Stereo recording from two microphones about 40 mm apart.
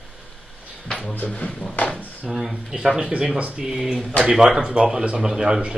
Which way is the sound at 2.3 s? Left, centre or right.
Centre.